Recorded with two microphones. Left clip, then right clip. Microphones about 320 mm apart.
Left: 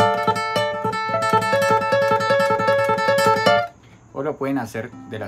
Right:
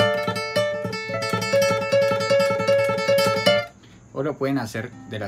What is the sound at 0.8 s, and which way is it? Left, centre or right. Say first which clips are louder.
Music: left 6 dB; centre.